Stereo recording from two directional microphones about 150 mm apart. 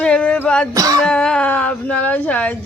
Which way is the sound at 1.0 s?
5° left (ahead or behind).